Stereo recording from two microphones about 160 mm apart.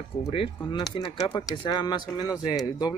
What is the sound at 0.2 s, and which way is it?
Speech, 35° left (ahead or behind).